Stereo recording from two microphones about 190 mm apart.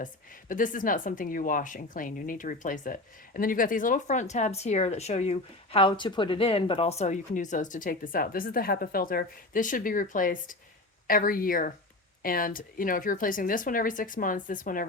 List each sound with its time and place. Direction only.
0.0 s speech: 45° left (ahead or behind)